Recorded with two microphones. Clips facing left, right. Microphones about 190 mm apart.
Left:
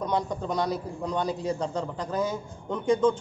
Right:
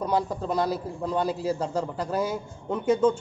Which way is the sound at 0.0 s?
5° right (ahead or behind).